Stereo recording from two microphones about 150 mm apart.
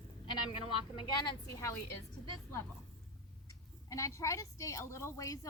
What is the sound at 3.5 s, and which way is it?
A woman's voice, 20° left (ahead or behind).